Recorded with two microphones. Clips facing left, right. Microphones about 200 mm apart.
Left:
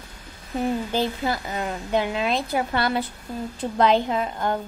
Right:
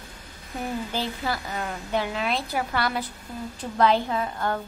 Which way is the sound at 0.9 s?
20° left (ahead or behind).